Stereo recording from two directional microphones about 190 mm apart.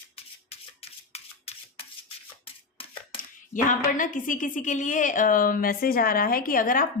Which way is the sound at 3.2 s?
45° left (ahead or behind).